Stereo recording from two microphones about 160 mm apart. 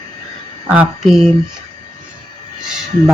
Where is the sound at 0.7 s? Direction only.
5° right (ahead or behind).